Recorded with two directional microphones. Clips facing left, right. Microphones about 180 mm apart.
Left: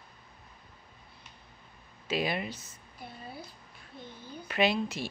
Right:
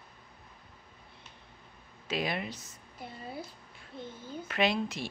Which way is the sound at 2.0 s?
Centre (ahead or behind).